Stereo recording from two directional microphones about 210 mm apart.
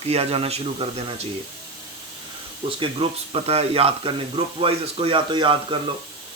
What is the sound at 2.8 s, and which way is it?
Speech, 25° right (ahead or behind).